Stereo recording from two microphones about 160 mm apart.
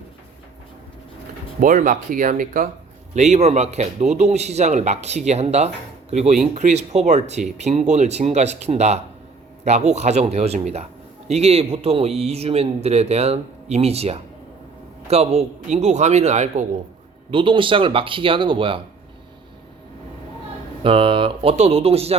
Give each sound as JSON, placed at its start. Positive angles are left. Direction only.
{"t": 1.6, "sound": "speech", "side_deg": -55}
{"t": 3.2, "sound": "a man's voice", "side_deg": -45}
{"t": 17.3, "sound": "speech", "side_deg": -30}
{"t": 20.8, "sound": "speech", "side_deg": -35}